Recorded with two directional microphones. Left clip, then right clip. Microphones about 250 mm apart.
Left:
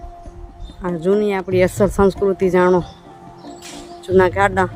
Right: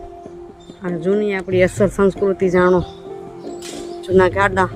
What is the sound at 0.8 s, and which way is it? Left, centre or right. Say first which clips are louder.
Speech: left 1 dB; centre.